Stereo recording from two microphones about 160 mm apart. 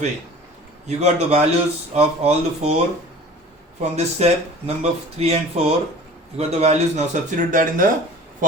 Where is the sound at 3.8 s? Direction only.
45° right (ahead or behind).